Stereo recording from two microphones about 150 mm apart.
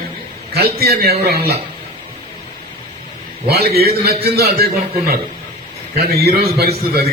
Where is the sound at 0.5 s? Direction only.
90° right.